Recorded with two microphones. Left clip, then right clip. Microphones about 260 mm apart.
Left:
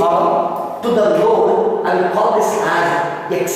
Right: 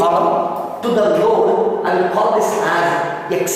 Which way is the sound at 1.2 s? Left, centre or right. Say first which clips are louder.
Left 1 dB; right.